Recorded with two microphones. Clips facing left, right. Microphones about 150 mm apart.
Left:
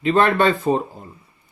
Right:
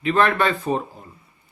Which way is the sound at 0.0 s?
30° left (ahead or behind).